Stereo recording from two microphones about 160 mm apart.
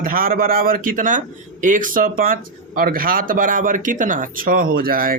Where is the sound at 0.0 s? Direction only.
65° right (ahead or behind).